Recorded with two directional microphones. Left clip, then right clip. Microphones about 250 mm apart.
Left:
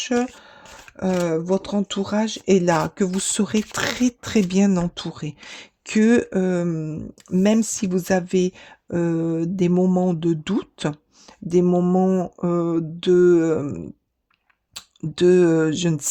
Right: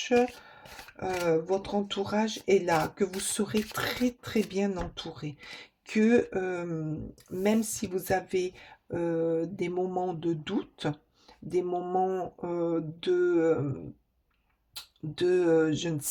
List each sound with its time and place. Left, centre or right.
0.0 s speech: left